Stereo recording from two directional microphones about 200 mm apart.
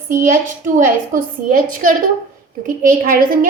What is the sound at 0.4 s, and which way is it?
A woman's voice, 40° right (ahead or behind).